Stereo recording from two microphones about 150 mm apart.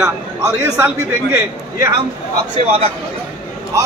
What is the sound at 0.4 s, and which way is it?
A man's voice, 15° right (ahead or behind).